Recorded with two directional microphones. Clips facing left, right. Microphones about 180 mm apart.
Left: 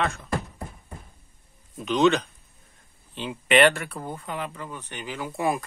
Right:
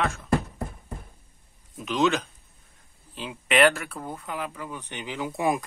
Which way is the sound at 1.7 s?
Centre (ahead or behind).